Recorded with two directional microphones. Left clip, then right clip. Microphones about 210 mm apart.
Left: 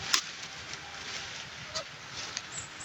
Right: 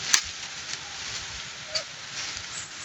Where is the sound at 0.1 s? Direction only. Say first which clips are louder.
Right 5 dB; 15° right (ahead or behind).